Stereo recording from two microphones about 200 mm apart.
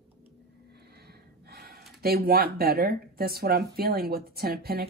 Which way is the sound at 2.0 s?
50° right (ahead or behind).